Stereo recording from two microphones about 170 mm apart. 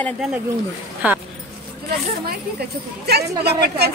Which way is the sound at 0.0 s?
Centre (ahead or behind).